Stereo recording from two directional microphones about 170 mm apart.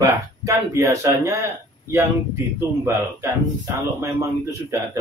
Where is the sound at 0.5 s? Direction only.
15° right (ahead or behind).